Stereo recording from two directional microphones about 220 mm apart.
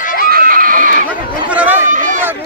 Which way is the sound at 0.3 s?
40° right (ahead or behind).